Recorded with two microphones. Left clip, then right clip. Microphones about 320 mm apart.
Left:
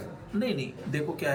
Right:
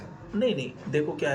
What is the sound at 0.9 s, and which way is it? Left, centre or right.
Speech, left.